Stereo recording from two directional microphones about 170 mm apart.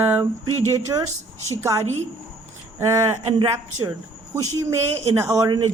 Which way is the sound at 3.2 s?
30° right (ahead or behind).